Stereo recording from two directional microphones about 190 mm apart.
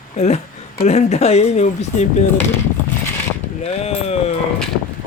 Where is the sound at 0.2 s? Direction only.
35° left (ahead or behind).